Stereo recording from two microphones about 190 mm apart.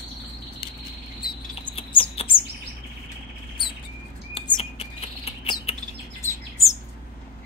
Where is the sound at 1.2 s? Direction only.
25° left (ahead or behind).